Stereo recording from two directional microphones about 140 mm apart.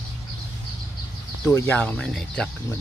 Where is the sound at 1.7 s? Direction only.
10° left (ahead or behind).